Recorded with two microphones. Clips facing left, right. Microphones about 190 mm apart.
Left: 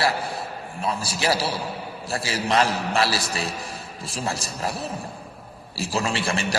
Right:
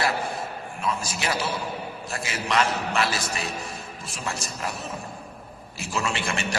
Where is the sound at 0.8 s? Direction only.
35° left (ahead or behind).